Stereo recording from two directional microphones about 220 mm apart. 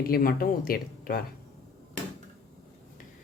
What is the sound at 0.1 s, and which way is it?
Speech, 40° left (ahead or behind).